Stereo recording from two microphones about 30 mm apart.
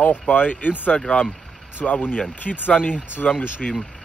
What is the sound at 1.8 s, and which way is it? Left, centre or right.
Speech, left.